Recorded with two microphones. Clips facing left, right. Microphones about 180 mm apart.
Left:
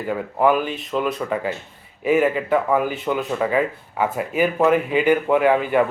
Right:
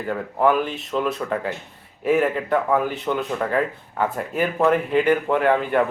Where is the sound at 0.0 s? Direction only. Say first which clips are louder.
Left 1 dB; 5° left (ahead or behind).